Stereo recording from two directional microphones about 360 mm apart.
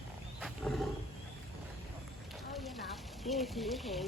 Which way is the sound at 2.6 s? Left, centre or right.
Centre.